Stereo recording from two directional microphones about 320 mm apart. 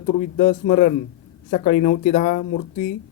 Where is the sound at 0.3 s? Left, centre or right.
Left.